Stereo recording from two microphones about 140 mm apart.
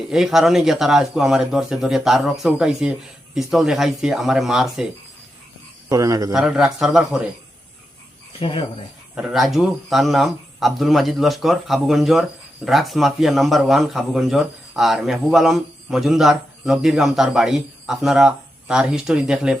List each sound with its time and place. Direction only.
0.1 s a man's voice: 5° right (ahead or behind)
5.9 s speech: 25° right (ahead or behind)
6.3 s a man's voice: 5° right (ahead or behind)
8.4 s speech: 40° left (ahead or behind)
9.1 s a man's voice: centre (ahead or behind)